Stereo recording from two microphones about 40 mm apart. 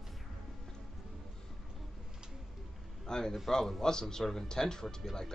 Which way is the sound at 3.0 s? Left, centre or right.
Centre.